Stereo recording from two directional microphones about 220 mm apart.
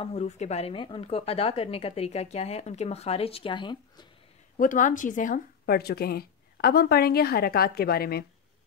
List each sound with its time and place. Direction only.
0.0 s speech: 30° left (ahead or behind)
4.6 s a woman's voice: 35° left (ahead or behind)